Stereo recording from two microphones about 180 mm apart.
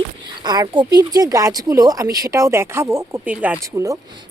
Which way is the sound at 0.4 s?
20° right (ahead or behind).